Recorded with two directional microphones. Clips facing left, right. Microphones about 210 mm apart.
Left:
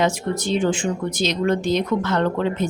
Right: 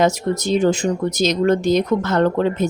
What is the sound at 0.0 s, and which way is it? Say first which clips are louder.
Speech: right 4 dB; 40° right (ahead or behind).